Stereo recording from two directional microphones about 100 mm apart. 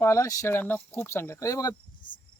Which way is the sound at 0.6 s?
20° left (ahead or behind).